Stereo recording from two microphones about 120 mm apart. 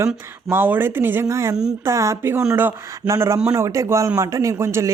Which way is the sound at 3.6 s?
25° right (ahead or behind).